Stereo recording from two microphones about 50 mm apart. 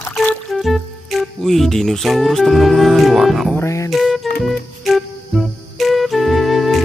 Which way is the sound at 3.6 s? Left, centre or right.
Left.